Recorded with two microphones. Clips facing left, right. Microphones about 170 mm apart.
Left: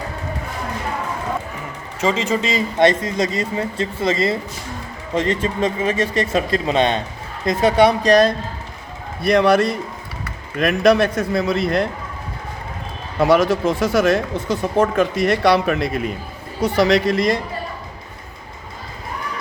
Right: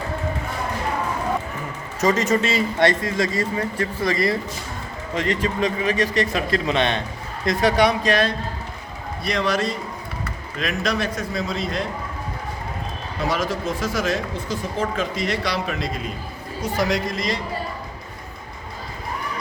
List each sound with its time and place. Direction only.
2.5 s a man's voice: 20° left (ahead or behind); by 8.3 s 40° left (ahead or behind)
9.2 s speech: 55° left (ahead or behind)
13.1 s a woman's voice: 65° left (ahead or behind)